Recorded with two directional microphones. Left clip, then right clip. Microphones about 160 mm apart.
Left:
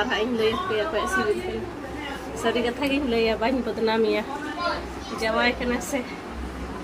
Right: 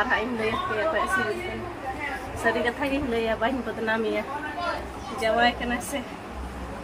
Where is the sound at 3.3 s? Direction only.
20° left (ahead or behind).